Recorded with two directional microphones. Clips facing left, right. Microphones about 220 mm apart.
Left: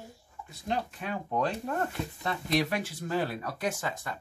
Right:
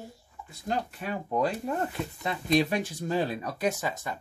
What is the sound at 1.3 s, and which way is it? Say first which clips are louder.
Speech: right 3 dB; 10° right (ahead or behind).